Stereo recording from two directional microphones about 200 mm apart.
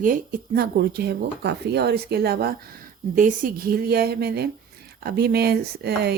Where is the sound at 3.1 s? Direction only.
40° right (ahead or behind).